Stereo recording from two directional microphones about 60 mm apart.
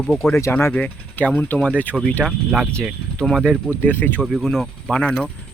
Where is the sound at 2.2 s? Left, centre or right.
Centre.